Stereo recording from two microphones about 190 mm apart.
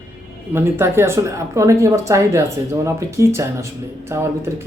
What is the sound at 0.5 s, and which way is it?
Speech, 10° right (ahead or behind).